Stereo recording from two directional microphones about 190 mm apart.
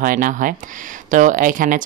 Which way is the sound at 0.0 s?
45° right (ahead or behind).